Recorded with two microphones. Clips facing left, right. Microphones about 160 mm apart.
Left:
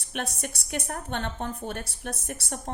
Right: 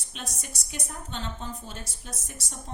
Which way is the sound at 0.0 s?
60° left (ahead or behind).